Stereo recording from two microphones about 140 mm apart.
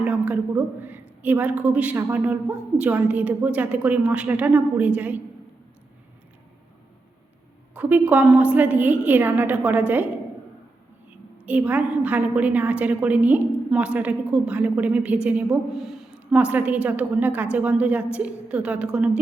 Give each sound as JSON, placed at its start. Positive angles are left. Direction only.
{"t": 0.0, "sound": "a woman's voice", "side_deg": -10}
{"t": 7.7, "sound": "a woman's voice", "side_deg": -10}
{"t": 11.3, "sound": "a woman's voice", "side_deg": -10}